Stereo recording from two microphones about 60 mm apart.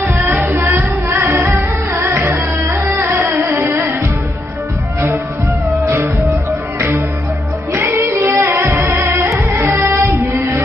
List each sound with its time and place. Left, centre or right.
0.2 s music: right
0.6 s music: right
7.8 s music: right